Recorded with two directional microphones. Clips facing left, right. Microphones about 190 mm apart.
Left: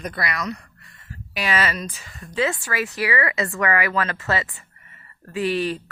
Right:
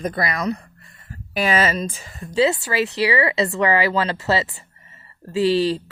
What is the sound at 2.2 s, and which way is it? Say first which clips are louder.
Speech: right 5 dB; 30° right (ahead or behind).